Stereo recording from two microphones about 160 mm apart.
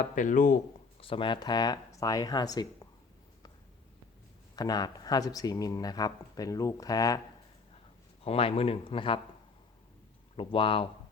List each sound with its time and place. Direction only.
0.0 s speech: 55° left (ahead or behind)
0.9 s speech: 35° left (ahead or behind)
4.5 s speech: 25° left (ahead or behind)
8.2 s speech: 35° left (ahead or behind)
10.3 s speech: 35° left (ahead or behind)